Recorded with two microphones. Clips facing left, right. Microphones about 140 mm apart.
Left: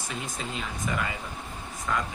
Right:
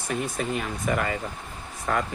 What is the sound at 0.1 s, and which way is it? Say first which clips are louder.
Speech: right 9 dB; 60° right (ahead or behind).